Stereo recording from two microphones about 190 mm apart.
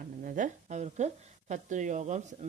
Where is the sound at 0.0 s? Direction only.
45° right (ahead or behind).